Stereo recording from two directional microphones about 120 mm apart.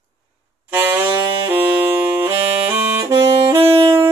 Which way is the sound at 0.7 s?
20° right (ahead or behind).